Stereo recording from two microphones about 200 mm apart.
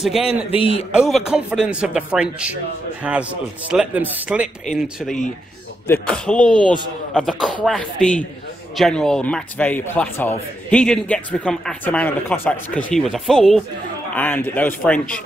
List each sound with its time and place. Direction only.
0.0 s speech: centre (ahead or behind)
0.5 s a man's voice: 30° left (ahead or behind)
0.9 s a man's voice: 5° right (ahead or behind)